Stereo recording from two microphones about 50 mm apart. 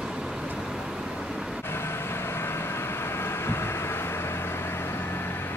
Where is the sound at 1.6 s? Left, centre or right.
Left.